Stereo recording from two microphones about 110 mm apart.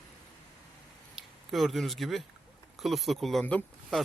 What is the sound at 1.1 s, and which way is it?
Speech, centre (ahead or behind).